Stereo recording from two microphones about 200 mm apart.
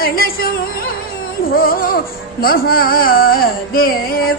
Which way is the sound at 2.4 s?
45° left (ahead or behind).